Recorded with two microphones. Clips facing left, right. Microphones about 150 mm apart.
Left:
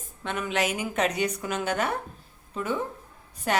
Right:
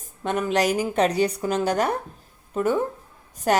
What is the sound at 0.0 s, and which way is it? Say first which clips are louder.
A woman's voice: right 6 dB; 40° right (ahead or behind).